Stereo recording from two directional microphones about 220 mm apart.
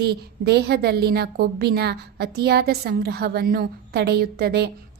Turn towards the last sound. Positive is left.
turn(degrees=-45)  # may be behind; listen again after turning